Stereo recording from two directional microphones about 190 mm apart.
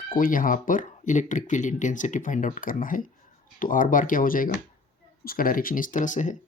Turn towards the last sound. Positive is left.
turn(degrees=40)  # may be behind; listen again after turning